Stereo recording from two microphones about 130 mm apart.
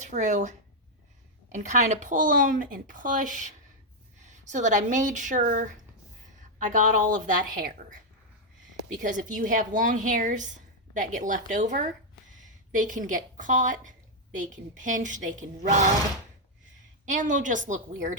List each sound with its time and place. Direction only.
0.0 s speech: 65° right (ahead or behind)
1.5 s speech: 70° right (ahead or behind)
4.3 s a woman's voice: 70° right (ahead or behind)
12.7 s speech: 90° right; by 15.4 s 75° right (ahead or behind)
17.1 s speech: 80° right